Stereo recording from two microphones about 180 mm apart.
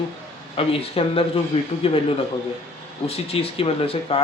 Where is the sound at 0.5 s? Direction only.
30° left (ahead or behind).